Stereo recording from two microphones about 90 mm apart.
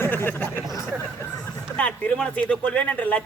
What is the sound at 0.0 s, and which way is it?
Speech, 25° left (ahead or behind).